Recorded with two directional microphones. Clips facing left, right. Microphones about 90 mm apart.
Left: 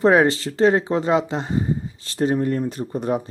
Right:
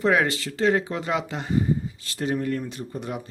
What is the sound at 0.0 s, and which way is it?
Speech, 30° left (ahead or behind).